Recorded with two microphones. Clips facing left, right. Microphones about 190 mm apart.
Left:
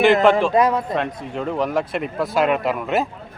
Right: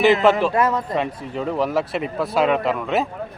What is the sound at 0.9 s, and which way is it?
Speech, 5° right (ahead or behind).